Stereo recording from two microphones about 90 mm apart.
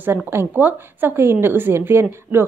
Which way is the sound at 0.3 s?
25° right (ahead or behind).